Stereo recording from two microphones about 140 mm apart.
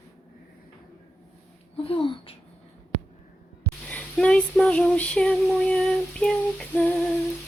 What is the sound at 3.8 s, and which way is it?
Female singing, 10° left (ahead or behind).